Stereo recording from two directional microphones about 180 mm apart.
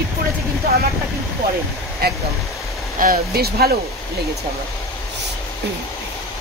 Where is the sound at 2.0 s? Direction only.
60° right (ahead or behind).